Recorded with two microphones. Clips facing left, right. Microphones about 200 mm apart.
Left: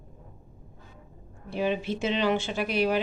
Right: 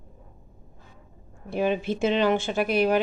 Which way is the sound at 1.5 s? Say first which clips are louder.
Right 3 dB; 50° right (ahead or behind).